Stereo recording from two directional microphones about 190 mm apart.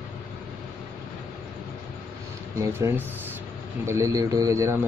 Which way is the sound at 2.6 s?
15° right (ahead or behind).